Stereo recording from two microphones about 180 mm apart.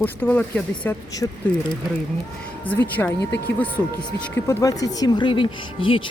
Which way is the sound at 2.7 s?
10° left (ahead or behind).